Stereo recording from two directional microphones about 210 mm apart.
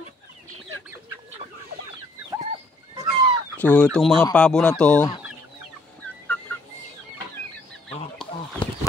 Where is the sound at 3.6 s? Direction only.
10° left (ahead or behind).